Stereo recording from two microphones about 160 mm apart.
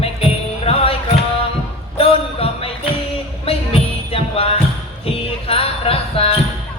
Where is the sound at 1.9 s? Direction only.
35° left (ahead or behind).